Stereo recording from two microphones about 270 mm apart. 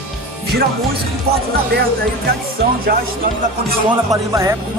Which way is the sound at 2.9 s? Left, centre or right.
Right.